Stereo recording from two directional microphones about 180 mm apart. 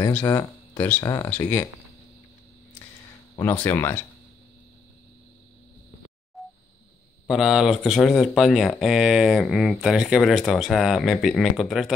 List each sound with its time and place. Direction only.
0.0 s speech: 20° left (ahead or behind)
3.3 s speech: 10° left (ahead or behind)
6.4 s a sound: centre (ahead or behind)
7.2 s speech: centre (ahead or behind)